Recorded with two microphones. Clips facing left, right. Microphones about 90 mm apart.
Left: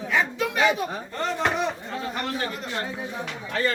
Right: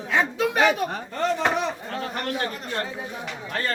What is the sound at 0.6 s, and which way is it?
Speech, 60° right (ahead or behind).